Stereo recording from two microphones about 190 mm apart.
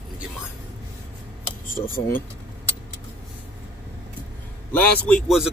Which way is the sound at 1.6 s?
45° left (ahead or behind).